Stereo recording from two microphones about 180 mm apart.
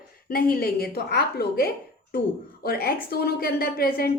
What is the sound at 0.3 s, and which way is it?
A woman's voice, 55° left (ahead or behind).